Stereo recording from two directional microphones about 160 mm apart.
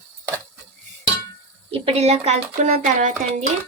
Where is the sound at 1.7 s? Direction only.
40° right (ahead or behind).